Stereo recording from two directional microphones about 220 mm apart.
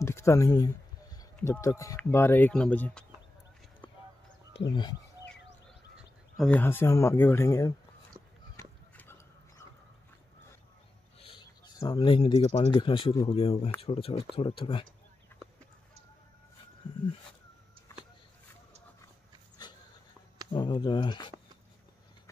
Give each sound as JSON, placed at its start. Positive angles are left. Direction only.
{"t": 0.0, "sound": "speech", "side_deg": 10}
{"t": 4.6, "sound": "speech", "side_deg": 20}
{"t": 6.3, "sound": "speech", "side_deg": 5}
{"t": 8.5, "sound": "a sound", "side_deg": 10}
{"t": 11.1, "sound": "speech", "side_deg": 25}
{"t": 20.5, "sound": "speech", "side_deg": 20}